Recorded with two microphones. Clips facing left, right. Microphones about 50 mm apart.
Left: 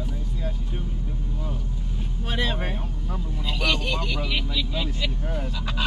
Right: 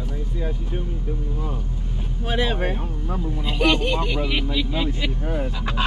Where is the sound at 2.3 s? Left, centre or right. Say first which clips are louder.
Right 5 dB; centre.